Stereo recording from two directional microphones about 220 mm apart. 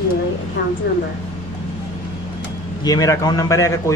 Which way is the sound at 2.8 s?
15° left (ahead or behind).